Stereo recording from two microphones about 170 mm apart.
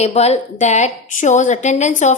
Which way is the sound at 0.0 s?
40° left (ahead or behind).